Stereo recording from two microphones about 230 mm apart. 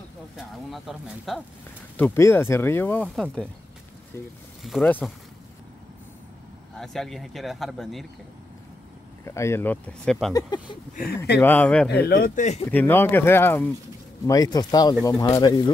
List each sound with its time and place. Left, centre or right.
0.4 s speech: centre
4.6 s speech: centre
6.8 s speech: centre
9.2 s speech: centre
10.3 s speech: centre
11.3 s speech: centre
11.9 s speech: left
12.7 s speech: centre